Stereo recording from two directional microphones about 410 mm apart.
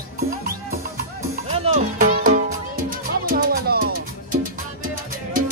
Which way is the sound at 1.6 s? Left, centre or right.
Centre.